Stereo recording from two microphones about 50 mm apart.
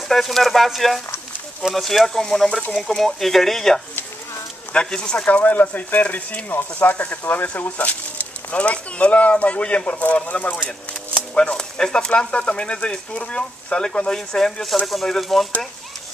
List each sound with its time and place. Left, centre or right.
0.1 s speech: centre
4.7 s speech: centre
11.3 s speech: centre